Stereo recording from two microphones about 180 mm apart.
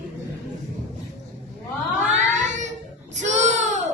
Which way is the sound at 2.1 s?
40° right (ahead or behind).